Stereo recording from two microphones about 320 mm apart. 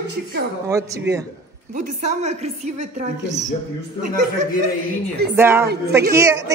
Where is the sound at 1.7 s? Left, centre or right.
Right.